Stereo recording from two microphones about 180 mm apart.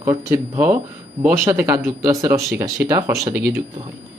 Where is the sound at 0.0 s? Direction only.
15° right (ahead or behind).